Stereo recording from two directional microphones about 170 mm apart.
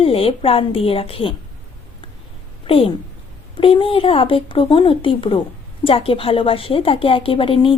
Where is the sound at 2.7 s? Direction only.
30° left (ahead or behind).